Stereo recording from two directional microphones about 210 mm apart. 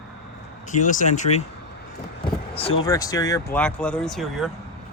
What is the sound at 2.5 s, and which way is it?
Speech, 25° left (ahead or behind).